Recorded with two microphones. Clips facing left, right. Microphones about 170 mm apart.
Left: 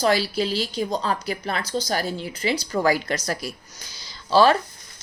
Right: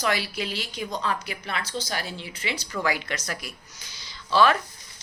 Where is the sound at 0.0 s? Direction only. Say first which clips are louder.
Left 6 dB; 35° left (ahead or behind).